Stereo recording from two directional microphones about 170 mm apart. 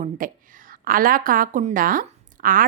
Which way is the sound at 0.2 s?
55° right (ahead or behind).